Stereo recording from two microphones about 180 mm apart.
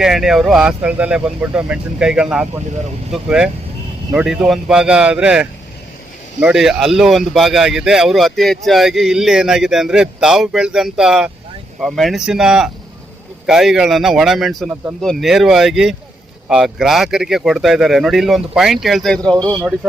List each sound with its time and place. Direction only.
0.0 s speech: centre (ahead or behind)
19.4 s speech: 25° right (ahead or behind)